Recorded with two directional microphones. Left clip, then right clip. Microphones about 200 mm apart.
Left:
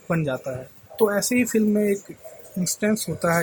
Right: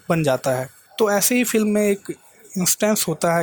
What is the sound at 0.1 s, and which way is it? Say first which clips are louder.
Speech: right 7 dB; 40° right (ahead or behind).